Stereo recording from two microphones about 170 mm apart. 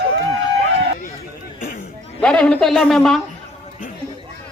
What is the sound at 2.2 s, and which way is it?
Speech, 5° left (ahead or behind).